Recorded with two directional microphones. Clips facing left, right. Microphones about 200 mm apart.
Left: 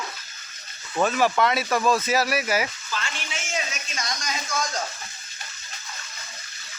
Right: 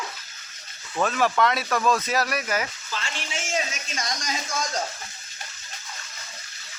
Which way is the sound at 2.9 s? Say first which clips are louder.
Even; 30° right (ahead or behind).